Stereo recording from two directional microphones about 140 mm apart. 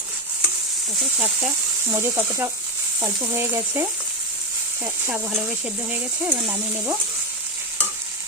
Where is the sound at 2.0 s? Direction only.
15° right (ahead or behind).